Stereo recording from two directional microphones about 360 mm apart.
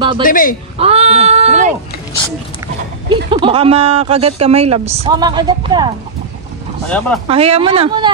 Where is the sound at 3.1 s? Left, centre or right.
Centre.